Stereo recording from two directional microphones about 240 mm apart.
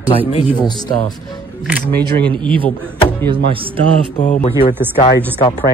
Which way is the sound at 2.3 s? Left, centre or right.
Right.